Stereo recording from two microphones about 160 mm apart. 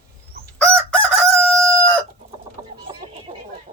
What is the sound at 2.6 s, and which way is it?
Chicken, 25° right (ahead or behind).